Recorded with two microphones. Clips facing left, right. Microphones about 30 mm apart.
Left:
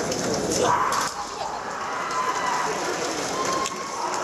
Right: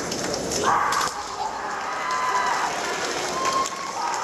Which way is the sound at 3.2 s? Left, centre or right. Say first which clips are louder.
Right 1 dB; right.